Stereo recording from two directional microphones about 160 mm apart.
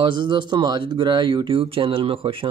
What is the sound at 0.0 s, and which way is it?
A man's voice, 30° right (ahead or behind).